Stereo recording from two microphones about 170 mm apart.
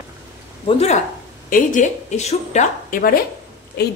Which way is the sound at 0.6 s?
40° left (ahead or behind).